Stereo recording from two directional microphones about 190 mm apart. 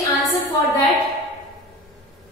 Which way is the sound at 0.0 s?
15° left (ahead or behind).